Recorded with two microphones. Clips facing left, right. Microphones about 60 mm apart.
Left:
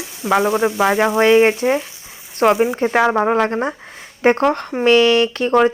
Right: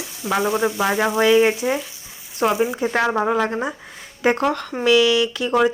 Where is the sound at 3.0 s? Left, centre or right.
Left.